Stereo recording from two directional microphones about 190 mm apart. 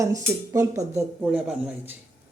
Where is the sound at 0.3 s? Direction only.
15° right (ahead or behind).